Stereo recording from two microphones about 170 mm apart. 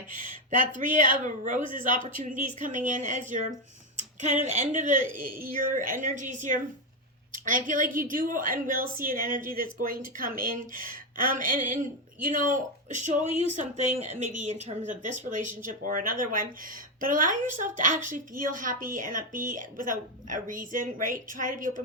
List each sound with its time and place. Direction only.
0.2 s speech: 50° right (ahead or behind)